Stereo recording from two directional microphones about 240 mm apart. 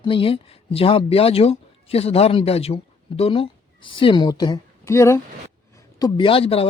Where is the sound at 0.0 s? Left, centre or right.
Left.